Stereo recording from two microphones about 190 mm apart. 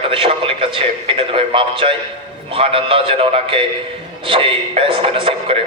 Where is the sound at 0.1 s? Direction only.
30° right (ahead or behind).